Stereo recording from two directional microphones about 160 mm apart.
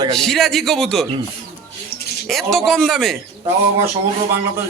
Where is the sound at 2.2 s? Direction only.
Centre (ahead or behind).